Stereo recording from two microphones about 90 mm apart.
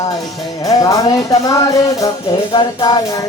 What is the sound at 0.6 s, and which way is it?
Music, 40° left (ahead or behind).